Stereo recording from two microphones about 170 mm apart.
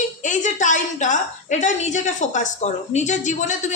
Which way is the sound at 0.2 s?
45° left (ahead or behind).